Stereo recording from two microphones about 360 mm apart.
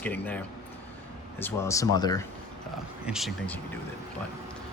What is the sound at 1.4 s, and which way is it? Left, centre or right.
Speech, centre.